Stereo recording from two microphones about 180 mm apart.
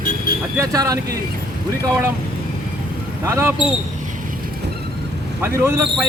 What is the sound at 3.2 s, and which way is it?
Speech, 15° right (ahead or behind).